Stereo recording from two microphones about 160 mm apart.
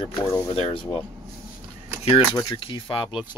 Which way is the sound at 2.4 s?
30° left (ahead or behind).